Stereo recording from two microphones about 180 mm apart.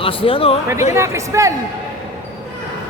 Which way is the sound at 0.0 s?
30° left (ahead or behind).